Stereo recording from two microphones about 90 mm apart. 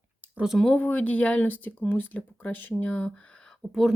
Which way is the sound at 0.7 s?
20° left (ahead or behind).